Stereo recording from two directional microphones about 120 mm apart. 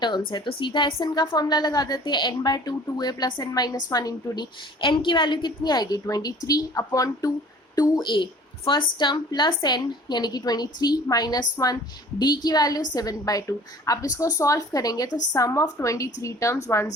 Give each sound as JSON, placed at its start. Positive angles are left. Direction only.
{"t": 0.0, "sound": "a woman's voice", "side_deg": 40}
{"t": 4.8, "sound": "a woman's voice", "side_deg": 45}